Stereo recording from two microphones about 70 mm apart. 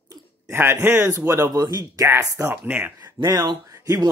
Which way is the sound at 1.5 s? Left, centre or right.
Right.